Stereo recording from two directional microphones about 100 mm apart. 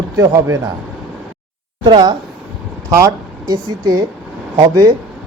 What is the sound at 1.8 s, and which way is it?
Speech, 50° right (ahead or behind).